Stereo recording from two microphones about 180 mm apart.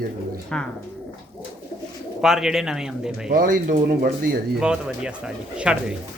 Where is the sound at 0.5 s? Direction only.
5° left (ahead or behind).